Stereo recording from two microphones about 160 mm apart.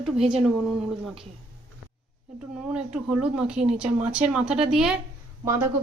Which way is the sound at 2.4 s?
5° right (ahead or behind).